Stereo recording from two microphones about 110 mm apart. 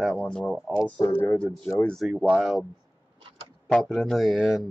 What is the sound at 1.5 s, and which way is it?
Speech, 5° left (ahead or behind).